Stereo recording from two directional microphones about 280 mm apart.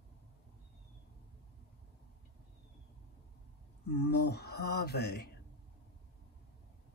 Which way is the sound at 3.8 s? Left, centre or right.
Left.